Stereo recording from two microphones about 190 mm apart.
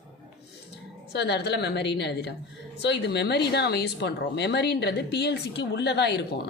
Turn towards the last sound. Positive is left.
turn(degrees=60)  # may be behind; listen again after turning